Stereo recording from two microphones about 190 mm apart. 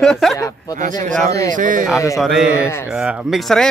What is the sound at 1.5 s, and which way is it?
Speech, 45° right (ahead or behind).